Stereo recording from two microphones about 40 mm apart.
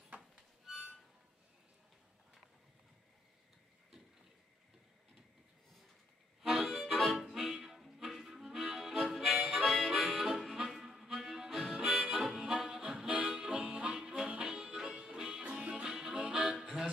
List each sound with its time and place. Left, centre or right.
0.7 s music: centre
6.4 s music: centre
9.5 s harmonica: centre
12.2 s harmonica: centre
13.1 s harmonica: right
13.4 s harmonica: right
14.3 s music: centre